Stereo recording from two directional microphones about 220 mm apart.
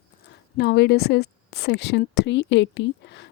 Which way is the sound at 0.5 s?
50° left (ahead or behind).